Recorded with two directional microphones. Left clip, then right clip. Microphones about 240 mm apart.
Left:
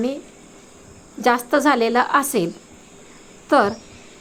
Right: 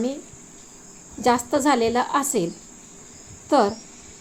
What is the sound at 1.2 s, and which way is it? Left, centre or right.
Speech, centre.